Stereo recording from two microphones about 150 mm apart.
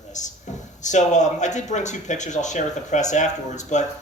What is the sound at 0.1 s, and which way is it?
Speech, 55° left (ahead or behind).